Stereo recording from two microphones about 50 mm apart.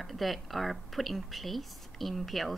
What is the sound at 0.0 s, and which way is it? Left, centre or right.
Speech, centre.